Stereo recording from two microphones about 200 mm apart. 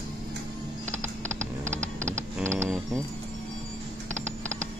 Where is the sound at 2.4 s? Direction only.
15° right (ahead or behind).